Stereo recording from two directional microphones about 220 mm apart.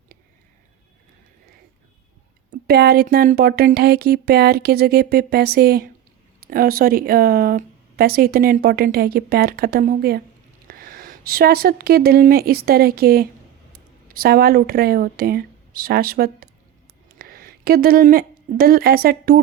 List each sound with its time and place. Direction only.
2.6 s speech: 45° right (ahead or behind)